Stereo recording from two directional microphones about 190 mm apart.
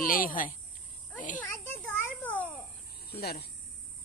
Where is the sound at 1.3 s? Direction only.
10° left (ahead or behind).